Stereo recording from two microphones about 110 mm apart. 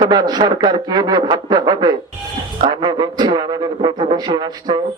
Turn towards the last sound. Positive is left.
turn(degrees=-40)  # may be behind; listen again after turning